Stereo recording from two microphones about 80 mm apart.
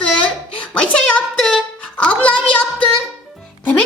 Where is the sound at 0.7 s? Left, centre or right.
Centre.